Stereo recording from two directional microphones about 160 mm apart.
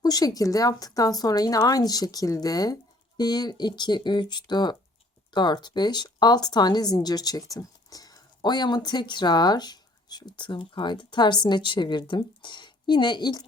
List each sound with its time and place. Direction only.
0.0 s speech: 25° left (ahead or behind)